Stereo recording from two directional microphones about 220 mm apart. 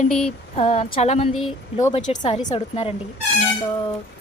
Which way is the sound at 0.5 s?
30° left (ahead or behind).